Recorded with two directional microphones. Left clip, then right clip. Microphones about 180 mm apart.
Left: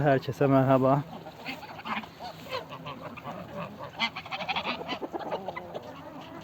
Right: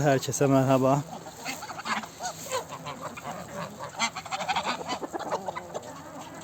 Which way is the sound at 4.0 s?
25° right (ahead or behind).